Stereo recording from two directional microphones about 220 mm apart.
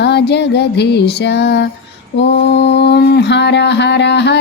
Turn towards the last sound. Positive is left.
turn(degrees=50)  # may be behind; listen again after turning